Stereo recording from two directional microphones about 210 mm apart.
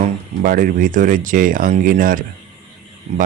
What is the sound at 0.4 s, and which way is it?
Speech, 40° right (ahead or behind).